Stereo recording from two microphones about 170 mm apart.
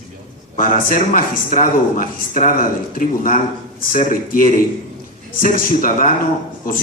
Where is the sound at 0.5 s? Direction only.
50° left (ahead or behind).